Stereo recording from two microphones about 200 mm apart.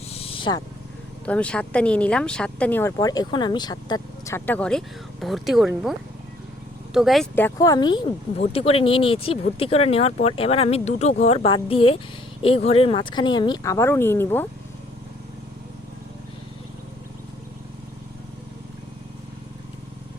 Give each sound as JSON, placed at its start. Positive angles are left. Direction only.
{"t": 0.1, "sound": "wild animals", "side_deg": 30}
{"t": 1.2, "sound": "speech", "side_deg": 5}
{"t": 7.3, "sound": "speech", "side_deg": 15}